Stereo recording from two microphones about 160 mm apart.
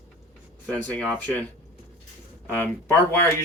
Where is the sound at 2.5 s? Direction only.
15° left (ahead or behind).